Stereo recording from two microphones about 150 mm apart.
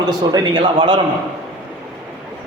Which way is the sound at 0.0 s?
25° right (ahead or behind).